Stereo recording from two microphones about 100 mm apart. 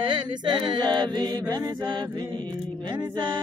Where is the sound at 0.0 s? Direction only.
50° right (ahead or behind).